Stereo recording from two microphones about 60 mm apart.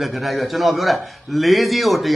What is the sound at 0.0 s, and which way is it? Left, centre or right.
A man's voice, centre.